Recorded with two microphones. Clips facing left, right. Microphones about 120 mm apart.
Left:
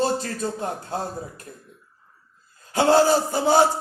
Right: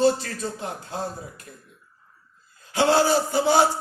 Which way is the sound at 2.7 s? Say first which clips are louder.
Left 2 dB; 45° left (ahead or behind).